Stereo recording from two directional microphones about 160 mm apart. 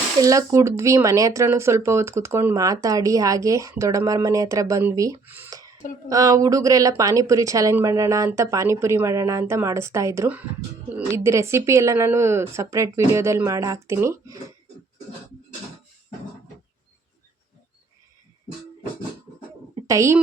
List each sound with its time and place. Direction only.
0.2 s speech: 20° right (ahead or behind)
19.9 s speech: 20° right (ahead or behind)